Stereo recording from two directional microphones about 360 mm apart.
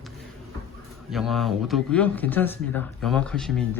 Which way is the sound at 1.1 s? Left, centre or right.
Centre.